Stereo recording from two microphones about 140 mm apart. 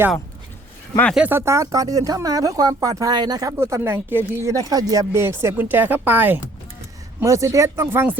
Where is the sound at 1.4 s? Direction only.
20° right (ahead or behind).